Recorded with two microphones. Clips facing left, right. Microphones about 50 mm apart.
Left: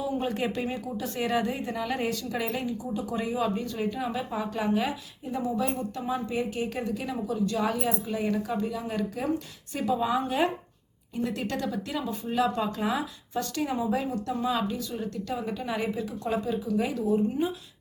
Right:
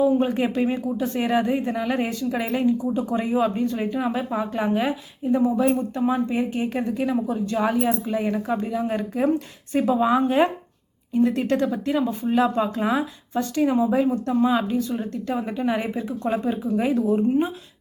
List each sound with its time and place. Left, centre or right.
0.0 s a woman's voice: right
7.7 s a woman's voice: centre; by 17.5 s right